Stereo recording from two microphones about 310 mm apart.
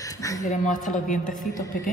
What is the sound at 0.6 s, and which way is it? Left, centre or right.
Speech, left.